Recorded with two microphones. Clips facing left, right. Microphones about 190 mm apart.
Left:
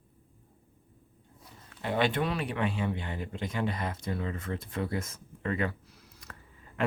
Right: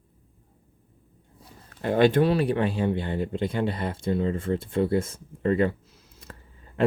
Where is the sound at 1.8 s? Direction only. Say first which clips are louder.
Right 9 dB; 45° right (ahead or behind).